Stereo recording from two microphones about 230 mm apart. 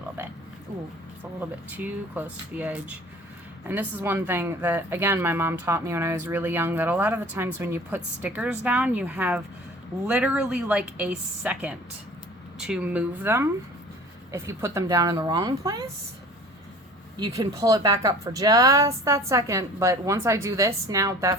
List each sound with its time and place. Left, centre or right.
1.4 s a woman's voice: centre
17.2 s speech: centre